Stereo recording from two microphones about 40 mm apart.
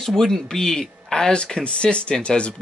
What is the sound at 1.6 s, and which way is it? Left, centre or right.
Speech, left.